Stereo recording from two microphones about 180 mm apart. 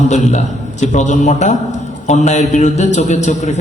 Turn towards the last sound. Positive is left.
turn(degrees=40)  # may be behind; listen again after turning